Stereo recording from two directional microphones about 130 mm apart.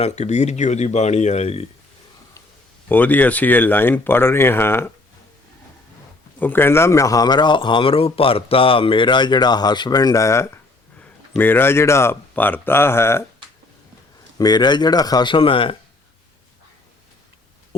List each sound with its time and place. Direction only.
0.0 s speech: 60° left (ahead or behind)
2.9 s speech: 15° left (ahead or behind)
6.4 s a man's voice: 15° left (ahead or behind)
14.3 s a man's voice: 30° left (ahead or behind)